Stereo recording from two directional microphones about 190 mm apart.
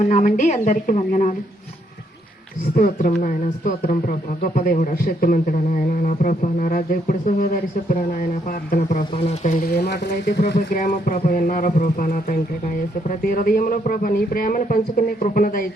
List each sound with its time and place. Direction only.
0.0 s a woman's voice: 40° left (ahead or behind)
2.7 s speech: 45° left (ahead or behind)
9.1 s a woman's voice: 35° left (ahead or behind)
9.7 s speech: 60° left (ahead or behind)